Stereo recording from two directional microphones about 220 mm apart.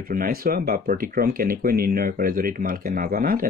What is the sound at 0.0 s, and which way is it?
Speech, 40° right (ahead or behind).